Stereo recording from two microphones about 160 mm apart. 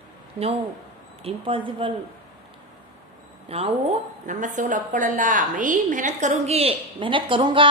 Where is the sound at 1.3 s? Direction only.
35° right (ahead or behind).